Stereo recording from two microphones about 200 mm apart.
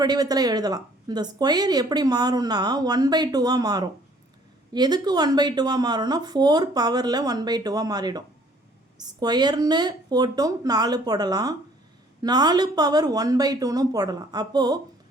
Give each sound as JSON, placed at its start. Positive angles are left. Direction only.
{"t": 0.0, "sound": "speech", "side_deg": -20}